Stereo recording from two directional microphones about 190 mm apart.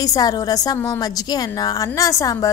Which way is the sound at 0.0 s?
20° left (ahead or behind).